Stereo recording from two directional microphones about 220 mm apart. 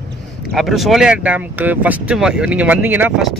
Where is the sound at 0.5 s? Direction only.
Centre (ahead or behind).